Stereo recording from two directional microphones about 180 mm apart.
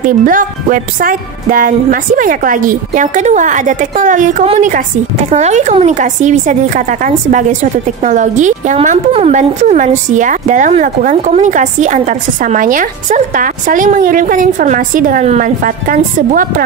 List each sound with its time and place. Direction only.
0.2 s a woman's voice: 50° right (ahead or behind)